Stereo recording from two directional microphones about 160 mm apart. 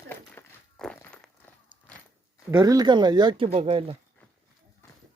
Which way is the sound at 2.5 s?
25° right (ahead or behind).